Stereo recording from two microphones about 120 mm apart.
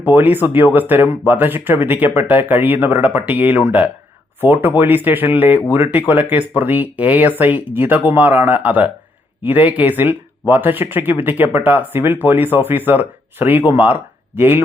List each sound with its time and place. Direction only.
0.0 s speech: 15° right (ahead or behind)